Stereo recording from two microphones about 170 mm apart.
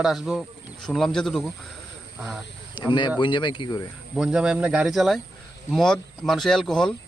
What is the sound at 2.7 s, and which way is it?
Speech, 25° left (ahead or behind).